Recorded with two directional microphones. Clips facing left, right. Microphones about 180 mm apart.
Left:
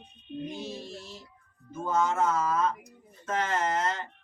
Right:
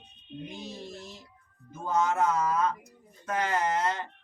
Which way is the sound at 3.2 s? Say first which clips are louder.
Even; 10° right (ahead or behind).